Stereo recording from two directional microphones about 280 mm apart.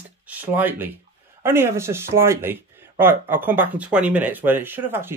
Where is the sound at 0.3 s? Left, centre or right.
Centre.